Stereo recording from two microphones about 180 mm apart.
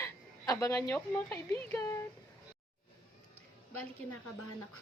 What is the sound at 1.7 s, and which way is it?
Speech, 15° left (ahead or behind).